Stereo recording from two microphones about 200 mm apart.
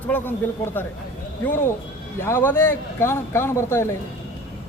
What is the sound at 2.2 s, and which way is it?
Speech, 10° left (ahead or behind).